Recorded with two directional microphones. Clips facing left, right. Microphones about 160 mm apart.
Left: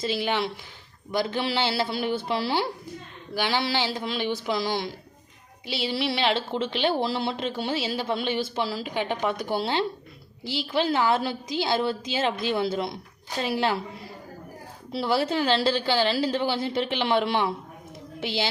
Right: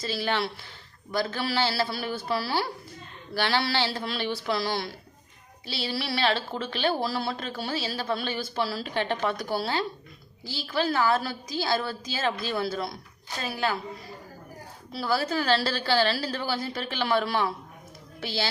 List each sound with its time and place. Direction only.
0.0 s a woman's voice: 20° left (ahead or behind)
14.9 s a woman's voice: 25° left (ahead or behind)